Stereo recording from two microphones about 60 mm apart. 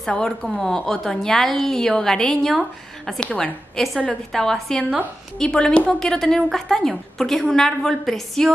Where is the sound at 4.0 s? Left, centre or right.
Centre.